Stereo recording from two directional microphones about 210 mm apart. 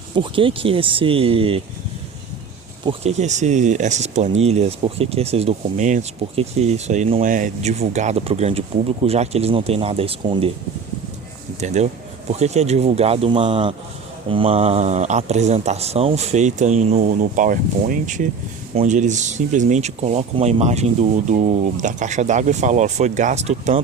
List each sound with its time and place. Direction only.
0.2 s speech: 25° right (ahead or behind)
2.8 s speech: 30° right (ahead or behind)
11.6 s speech: 35° right (ahead or behind)